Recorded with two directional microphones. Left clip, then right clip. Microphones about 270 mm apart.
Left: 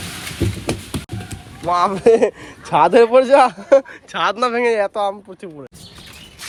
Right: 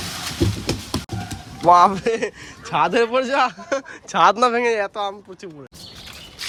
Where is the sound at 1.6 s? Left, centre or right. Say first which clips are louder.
Right 5 dB; centre.